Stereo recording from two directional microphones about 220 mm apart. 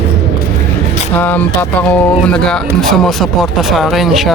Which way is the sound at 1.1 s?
10° left (ahead or behind).